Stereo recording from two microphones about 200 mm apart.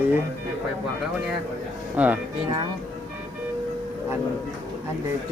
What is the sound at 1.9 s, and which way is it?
Speech, 10° right (ahead or behind).